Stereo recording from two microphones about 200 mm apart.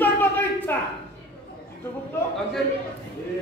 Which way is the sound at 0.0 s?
10° left (ahead or behind).